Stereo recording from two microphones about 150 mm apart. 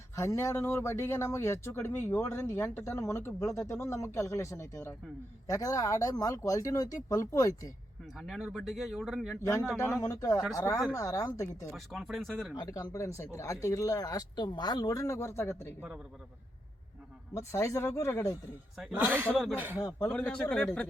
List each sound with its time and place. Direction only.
0.2 s speech: 20° left (ahead or behind)
8.2 s speech: 5° right (ahead or behind)
10.0 s speech: 25° left (ahead or behind)
11.7 s speech: centre (ahead or behind)
12.5 s speech: 25° left (ahead or behind)
17.3 s speech: 20° left (ahead or behind)
18.9 s speech: 10° right (ahead or behind)
19.3 s speech: 5° left (ahead or behind)
19.7 s speech: 25° left (ahead or behind)
20.1 s speech: 10° left (ahead or behind)